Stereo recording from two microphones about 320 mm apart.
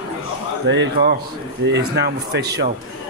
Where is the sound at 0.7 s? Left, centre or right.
Right.